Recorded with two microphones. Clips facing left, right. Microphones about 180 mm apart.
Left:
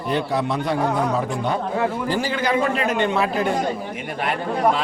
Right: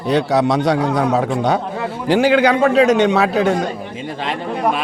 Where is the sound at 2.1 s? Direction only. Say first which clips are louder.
Right 9 dB; 70° right (ahead or behind).